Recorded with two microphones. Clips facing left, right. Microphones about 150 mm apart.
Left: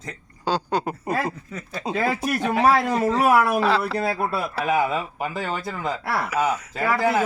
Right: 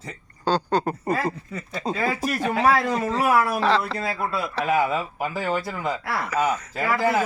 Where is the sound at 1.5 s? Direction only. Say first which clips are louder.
Left 1 dB; 5° right (ahead or behind).